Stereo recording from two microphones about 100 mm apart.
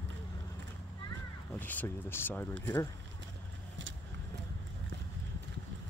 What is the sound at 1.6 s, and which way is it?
Speech, 20° left (ahead or behind).